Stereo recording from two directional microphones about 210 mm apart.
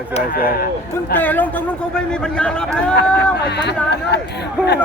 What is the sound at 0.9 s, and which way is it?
A man's voice, 10° left (ahead or behind).